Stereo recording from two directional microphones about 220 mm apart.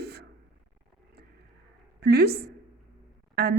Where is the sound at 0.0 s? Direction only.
45° right (ahead or behind).